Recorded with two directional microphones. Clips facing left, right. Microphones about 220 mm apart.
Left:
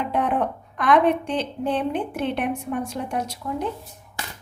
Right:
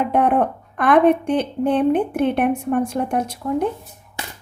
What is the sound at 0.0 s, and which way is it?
A woman's voice, 55° right (ahead or behind).